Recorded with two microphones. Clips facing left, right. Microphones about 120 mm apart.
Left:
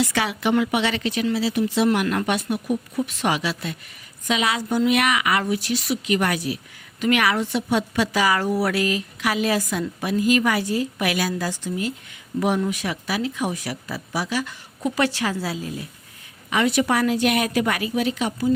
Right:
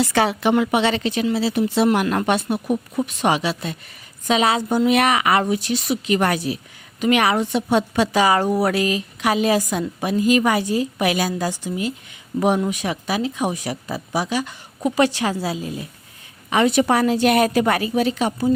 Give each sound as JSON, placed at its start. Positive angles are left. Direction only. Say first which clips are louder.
{"t": 0.0, "sound": "a woman's voice", "louder": "right 4 dB", "side_deg": -35}
{"t": 3.1, "sound": "a woman's voice", "louder": "right 5 dB", "side_deg": -20}